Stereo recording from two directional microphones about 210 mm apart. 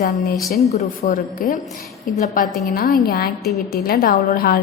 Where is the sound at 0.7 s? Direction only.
35° left (ahead or behind).